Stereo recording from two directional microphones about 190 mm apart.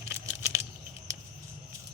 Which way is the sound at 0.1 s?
15° right (ahead or behind).